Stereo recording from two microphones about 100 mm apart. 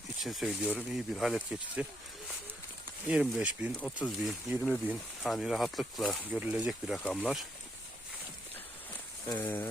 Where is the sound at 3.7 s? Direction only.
5° left (ahead or behind).